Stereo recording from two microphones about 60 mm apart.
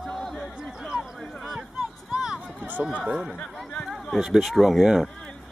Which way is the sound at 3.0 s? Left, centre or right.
Centre.